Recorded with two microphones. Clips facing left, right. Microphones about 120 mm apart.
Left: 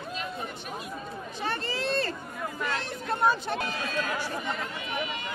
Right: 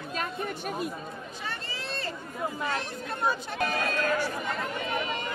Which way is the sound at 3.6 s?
50° right (ahead or behind).